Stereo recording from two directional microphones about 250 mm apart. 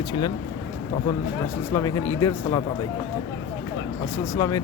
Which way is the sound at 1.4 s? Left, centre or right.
Centre.